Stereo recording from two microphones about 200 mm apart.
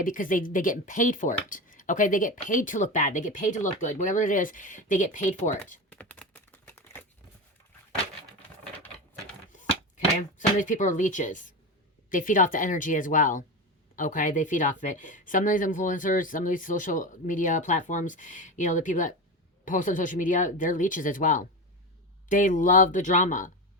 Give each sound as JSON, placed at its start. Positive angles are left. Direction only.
{"t": 0.0, "sound": "speech", "side_deg": 40}
{"t": 5.9, "sound": "typing", "side_deg": 5}
{"t": 10.3, "sound": "speech", "side_deg": 40}